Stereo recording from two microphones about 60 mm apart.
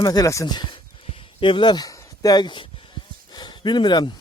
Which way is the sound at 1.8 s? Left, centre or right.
Left.